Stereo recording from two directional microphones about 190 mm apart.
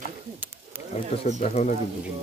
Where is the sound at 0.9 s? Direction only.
35° left (ahead or behind).